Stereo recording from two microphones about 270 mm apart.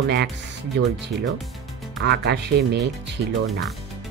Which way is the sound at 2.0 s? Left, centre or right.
Right.